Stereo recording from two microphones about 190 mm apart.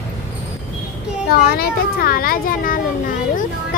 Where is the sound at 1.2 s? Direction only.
55° left (ahead or behind).